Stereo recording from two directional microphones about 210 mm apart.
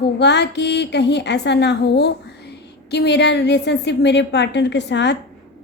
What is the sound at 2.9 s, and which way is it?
A woman's voice, 55° left (ahead or behind).